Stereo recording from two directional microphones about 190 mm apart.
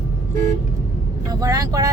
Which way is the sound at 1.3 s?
20° right (ahead or behind).